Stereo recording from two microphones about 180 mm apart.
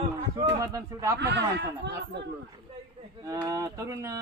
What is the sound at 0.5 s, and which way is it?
Speech, 15° right (ahead or behind).